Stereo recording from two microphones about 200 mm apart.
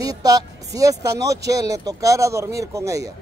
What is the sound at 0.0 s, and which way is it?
Speech, 20° right (ahead or behind).